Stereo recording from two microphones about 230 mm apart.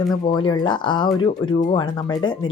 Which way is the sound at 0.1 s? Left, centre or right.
Centre.